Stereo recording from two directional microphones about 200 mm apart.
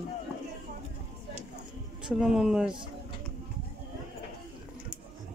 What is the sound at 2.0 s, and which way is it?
Speech, 5° right (ahead or behind).